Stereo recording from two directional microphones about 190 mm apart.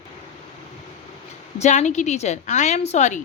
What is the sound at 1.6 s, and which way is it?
A woman's voice, 35° left (ahead or behind).